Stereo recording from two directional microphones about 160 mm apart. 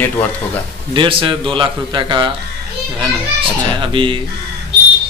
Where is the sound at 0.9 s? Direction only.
30° right (ahead or behind).